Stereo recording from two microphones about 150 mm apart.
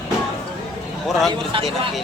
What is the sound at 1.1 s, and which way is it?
Speech, centre (ahead or behind).